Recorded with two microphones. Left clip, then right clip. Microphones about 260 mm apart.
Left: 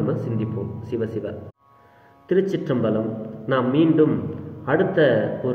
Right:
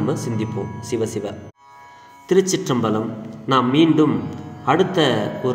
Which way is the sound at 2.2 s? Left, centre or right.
Right.